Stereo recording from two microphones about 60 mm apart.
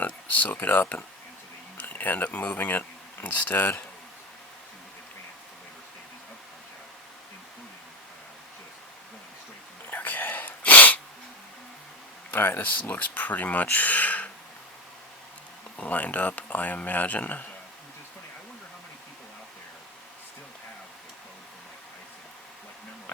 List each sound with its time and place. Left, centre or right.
0.0 s speech: left
9.9 s sneeze: left
12.3 s speech: left
15.8 s speech: left